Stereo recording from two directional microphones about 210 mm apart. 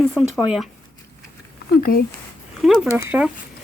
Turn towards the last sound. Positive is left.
turn(degrees=-5)  # may be behind; listen again after turning